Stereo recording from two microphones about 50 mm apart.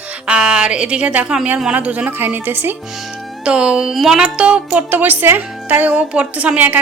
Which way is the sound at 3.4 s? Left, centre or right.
Right.